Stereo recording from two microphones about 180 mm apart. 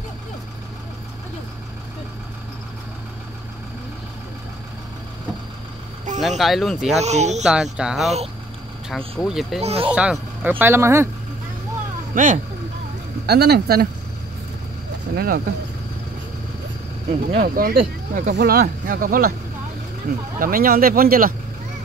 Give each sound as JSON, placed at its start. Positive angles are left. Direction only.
{"t": 6.2, "sound": "speech", "side_deg": 0}
{"t": 7.0, "sound": "speech", "side_deg": -40}
{"t": 7.4, "sound": "speech", "side_deg": -5}
{"t": 9.6, "sound": "speech", "side_deg": -35}
{"t": 9.8, "sound": "speech", "side_deg": -5}
{"t": 12.1, "sound": "speech", "side_deg": -50}
{"t": 13.3, "sound": "speech", "side_deg": -65}
{"t": 15.1, "sound": "speech", "side_deg": -55}
{"t": 17.3, "sound": "speech", "side_deg": -55}
{"t": 20.3, "sound": "speech", "side_deg": -50}